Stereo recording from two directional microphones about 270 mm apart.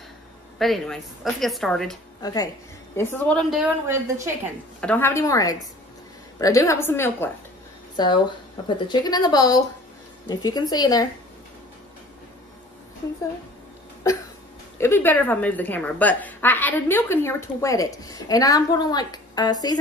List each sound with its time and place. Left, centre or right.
0.6 s a woman's voice: centre
2.2 s a woman's voice: centre
4.7 s a woman's voice: centre
14.8 s a woman's voice: centre